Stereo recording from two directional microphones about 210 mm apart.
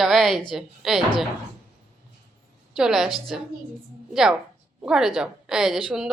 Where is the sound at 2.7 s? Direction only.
Centre (ahead or behind).